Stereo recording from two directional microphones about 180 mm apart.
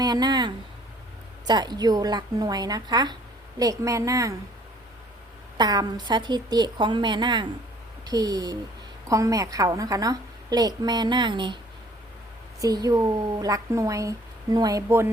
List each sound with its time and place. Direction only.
0.0 s a woman's voice: 20° right (ahead or behind)
5.5 s speech: 20° right (ahead or behind)
12.5 s speech: 20° right (ahead or behind)